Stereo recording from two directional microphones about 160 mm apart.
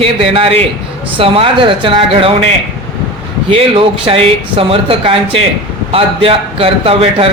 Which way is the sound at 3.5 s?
35° right (ahead or behind).